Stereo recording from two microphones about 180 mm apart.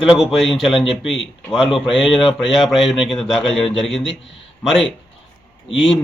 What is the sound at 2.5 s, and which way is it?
Speech, centre (ahead or behind).